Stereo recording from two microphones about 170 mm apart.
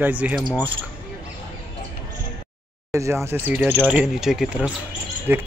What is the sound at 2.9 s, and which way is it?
Speech, 15° right (ahead or behind).